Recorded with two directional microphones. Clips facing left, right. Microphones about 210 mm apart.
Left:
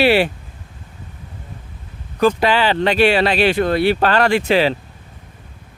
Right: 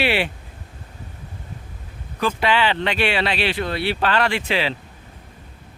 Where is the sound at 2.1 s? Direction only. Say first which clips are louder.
Left 5 dB; 40° left (ahead or behind).